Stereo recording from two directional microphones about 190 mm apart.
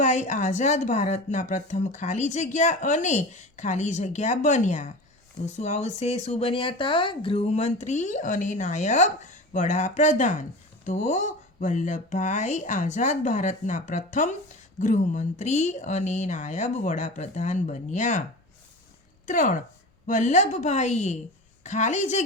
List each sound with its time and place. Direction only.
0.0 s speech: 40° left (ahead or behind)
19.2 s speech: 40° left (ahead or behind)